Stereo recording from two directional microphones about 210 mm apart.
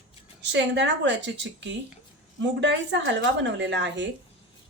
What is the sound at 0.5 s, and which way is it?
Speech, 55° right (ahead or behind).